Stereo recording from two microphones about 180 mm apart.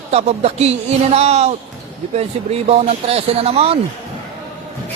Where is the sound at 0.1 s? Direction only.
35° right (ahead or behind).